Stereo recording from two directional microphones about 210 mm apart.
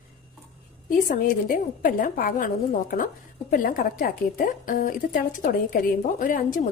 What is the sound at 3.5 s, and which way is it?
A woman's voice, 40° left (ahead or behind).